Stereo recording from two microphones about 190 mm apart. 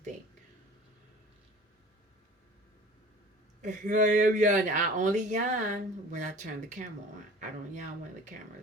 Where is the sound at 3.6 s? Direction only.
40° right (ahead or behind).